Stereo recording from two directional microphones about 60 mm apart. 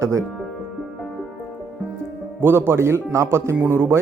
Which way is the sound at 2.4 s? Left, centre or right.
Right.